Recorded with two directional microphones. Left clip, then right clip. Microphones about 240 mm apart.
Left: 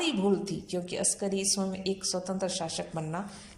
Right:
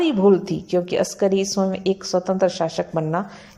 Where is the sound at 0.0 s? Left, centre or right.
Right.